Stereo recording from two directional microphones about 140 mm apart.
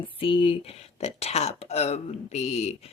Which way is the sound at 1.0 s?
50° left (ahead or behind).